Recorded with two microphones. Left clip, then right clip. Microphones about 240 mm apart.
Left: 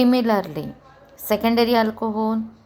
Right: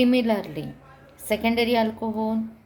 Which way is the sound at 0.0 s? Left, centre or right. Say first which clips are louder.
Left 3 dB; left.